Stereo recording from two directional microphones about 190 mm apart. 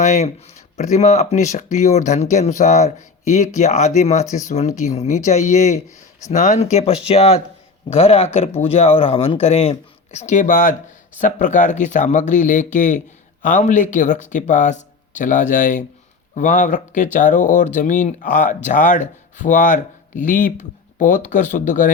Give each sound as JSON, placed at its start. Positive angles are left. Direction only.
{"t": 0.0, "sound": "speech", "side_deg": 35}